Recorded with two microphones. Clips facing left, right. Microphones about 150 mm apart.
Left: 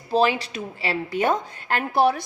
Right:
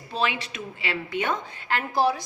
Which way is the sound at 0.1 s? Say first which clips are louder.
Left 7 dB; 35° left (ahead or behind).